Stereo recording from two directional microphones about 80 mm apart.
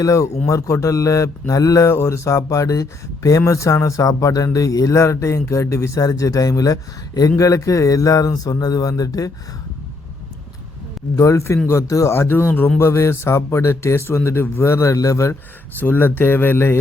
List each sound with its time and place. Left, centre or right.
0.0 s a man's voice: left
1.9 s a man's voice: left
11.2 s speech: left
12.8 s speech: left
15.8 s speech: left